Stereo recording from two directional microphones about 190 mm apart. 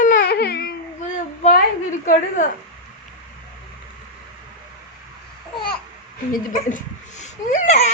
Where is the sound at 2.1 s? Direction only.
40° left (ahead or behind).